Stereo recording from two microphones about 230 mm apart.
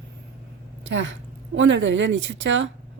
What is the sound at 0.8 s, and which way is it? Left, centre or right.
Speech, right.